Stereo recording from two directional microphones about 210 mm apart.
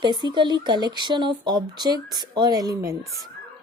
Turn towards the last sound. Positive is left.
turn(degrees=-15)  # may be behind; listen again after turning